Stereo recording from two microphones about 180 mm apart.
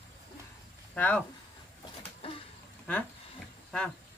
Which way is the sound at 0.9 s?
10° left (ahead or behind).